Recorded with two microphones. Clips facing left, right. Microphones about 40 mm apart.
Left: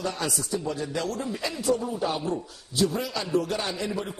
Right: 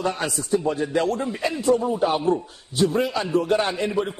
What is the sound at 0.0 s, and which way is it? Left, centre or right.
A man's voice, right.